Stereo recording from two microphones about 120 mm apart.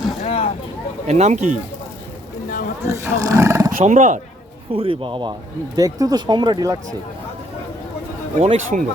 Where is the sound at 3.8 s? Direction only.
85° right.